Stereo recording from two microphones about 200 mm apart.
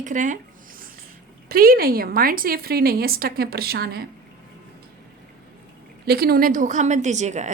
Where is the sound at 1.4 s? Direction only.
45° right (ahead or behind).